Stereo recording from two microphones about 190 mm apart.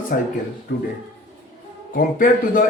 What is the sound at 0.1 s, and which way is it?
Speech, 50° left (ahead or behind).